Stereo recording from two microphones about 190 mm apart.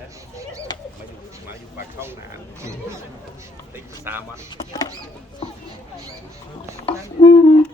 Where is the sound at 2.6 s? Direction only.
15° right (ahead or behind).